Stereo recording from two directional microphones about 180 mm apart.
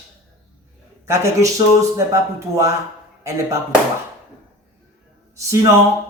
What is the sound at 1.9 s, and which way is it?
Speech, 15° right (ahead or behind).